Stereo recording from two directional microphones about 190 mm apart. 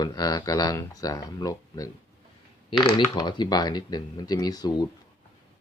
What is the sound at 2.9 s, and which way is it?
Speech, 25° left (ahead or behind).